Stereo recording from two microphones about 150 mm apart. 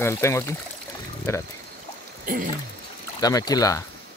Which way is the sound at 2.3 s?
75° right (ahead or behind).